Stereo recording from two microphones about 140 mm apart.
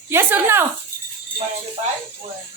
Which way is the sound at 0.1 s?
15° right (ahead or behind).